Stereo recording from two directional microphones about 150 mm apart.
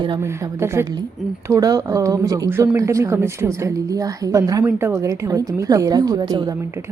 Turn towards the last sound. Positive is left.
turn(degrees=-25)  # may be behind; listen again after turning